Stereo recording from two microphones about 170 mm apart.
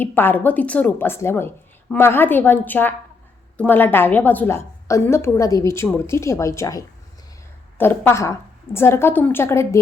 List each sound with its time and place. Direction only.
0.0 s a woman's voice: 10° left (ahead or behind)